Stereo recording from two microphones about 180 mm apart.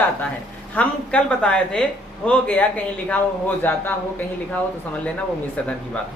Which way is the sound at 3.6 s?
10° left (ahead or behind).